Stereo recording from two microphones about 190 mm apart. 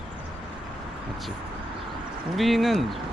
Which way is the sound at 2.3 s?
Centre (ahead or behind).